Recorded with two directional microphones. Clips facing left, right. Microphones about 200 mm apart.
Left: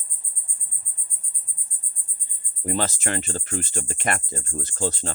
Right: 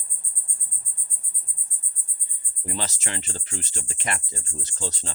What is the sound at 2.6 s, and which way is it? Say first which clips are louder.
Cricket: left 7 dB; 50° left (ahead or behind).